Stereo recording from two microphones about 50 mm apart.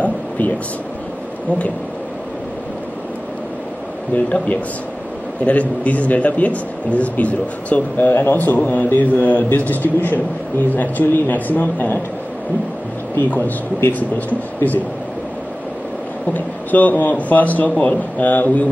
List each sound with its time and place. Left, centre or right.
0.0 s a sound: left
4.1 s a man's voice: left
8.1 s a man's voice: left
8.4 s a man's voice: left
13.8 s a man's voice: left
16.3 s a man's voice: left